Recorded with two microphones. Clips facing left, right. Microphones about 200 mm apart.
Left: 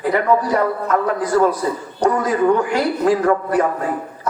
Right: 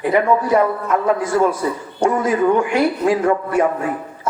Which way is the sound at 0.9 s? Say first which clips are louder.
Even; 25° right (ahead or behind).